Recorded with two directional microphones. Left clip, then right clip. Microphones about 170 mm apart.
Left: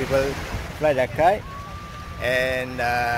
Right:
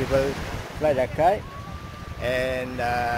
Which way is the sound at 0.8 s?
10° left (ahead or behind).